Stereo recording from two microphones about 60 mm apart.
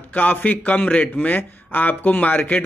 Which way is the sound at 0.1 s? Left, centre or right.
Left.